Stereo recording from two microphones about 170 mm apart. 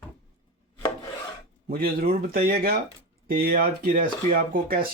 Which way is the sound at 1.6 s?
60° right (ahead or behind).